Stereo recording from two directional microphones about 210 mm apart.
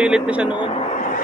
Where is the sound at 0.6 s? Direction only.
30° left (ahead or behind).